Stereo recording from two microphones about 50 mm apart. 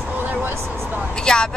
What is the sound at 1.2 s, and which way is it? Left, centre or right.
Speech, centre.